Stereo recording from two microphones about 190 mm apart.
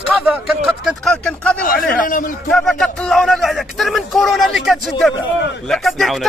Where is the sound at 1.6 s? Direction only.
50° left (ahead or behind).